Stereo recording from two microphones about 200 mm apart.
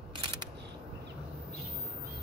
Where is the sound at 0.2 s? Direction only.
25° right (ahead or behind).